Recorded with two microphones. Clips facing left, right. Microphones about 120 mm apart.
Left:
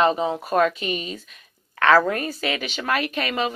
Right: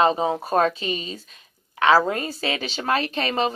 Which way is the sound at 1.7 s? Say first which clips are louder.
Even; 20° right (ahead or behind).